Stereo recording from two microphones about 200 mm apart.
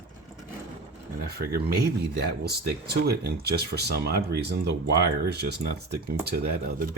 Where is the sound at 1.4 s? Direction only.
50° right (ahead or behind).